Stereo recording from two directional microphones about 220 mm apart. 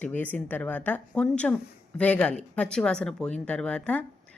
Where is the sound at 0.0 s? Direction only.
5° left (ahead or behind).